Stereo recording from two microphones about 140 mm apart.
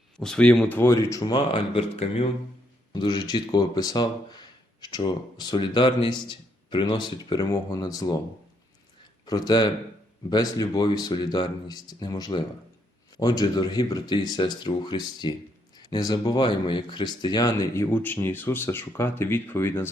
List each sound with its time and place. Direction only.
0.2 s speech: 5° left (ahead or behind); by 2.2 s 45° left (ahead or behind)
2.9 s speech: 30° left (ahead or behind)
9.2 s speech: 30° left (ahead or behind)
17.8 s speech: 15° left (ahead or behind)